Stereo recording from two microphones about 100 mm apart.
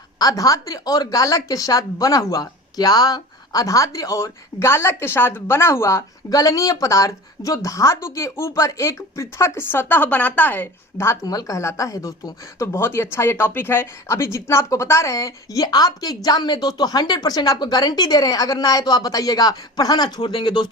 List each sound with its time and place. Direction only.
0.2 s speech: 35° left (ahead or behind)